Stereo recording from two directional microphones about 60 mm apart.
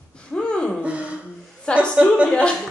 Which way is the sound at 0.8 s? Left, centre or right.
Right.